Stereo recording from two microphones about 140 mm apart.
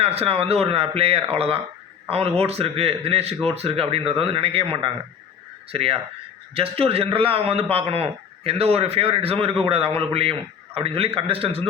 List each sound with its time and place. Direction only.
0.0 s a man's voice: 45° right (ahead or behind)